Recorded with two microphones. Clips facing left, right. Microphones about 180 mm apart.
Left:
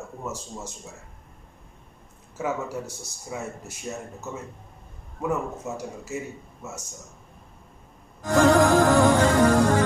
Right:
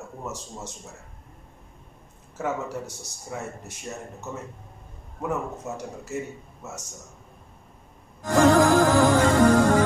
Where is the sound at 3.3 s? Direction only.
5° left (ahead or behind).